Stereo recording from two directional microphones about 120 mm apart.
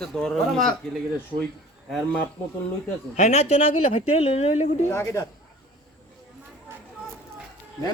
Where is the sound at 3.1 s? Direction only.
70° left (ahead or behind).